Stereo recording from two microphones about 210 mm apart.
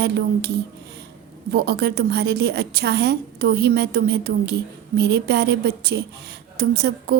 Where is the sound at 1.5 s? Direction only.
50° right (ahead or behind).